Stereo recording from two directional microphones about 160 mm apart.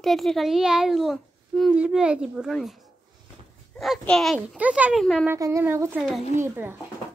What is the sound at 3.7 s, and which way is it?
A child's voice, 5° left (ahead or behind).